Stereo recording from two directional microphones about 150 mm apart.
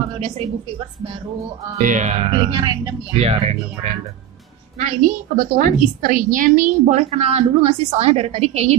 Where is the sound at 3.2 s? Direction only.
45° right (ahead or behind).